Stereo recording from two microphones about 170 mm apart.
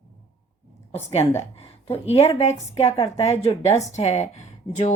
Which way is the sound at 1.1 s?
40° left (ahead or behind).